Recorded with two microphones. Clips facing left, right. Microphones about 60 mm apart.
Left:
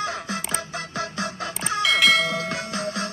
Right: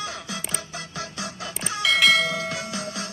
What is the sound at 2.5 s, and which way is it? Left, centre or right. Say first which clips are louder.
Music: left 3 dB; left.